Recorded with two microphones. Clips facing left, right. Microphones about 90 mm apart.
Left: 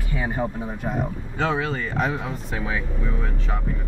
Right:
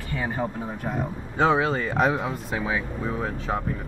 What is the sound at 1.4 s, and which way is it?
Speech, 20° right (ahead or behind).